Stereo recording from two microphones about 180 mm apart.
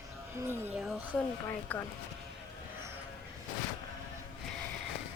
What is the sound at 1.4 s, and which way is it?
Speech, 10° left (ahead or behind).